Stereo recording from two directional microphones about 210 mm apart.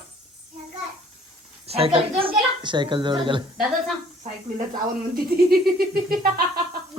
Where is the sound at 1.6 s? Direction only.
30° right (ahead or behind).